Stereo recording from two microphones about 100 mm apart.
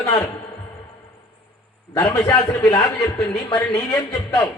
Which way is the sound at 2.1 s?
35° left (ahead or behind).